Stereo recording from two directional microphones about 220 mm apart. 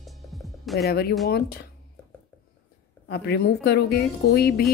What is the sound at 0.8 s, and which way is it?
Speech, 45° left (ahead or behind).